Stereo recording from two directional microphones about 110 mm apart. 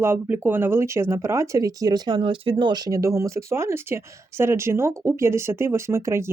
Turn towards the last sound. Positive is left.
turn(degrees=-25)  # may be behind; listen again after turning